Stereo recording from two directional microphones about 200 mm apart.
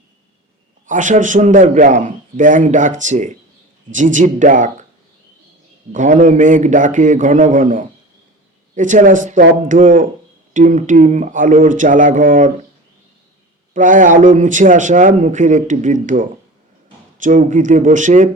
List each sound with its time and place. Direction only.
0.9 s a man's voice: 40° right (ahead or behind)
5.9 s a man's voice: 40° right (ahead or behind)
13.7 s a man's voice: 40° right (ahead or behind)